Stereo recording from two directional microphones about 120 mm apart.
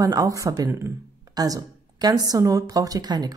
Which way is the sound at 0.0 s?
30° right (ahead or behind).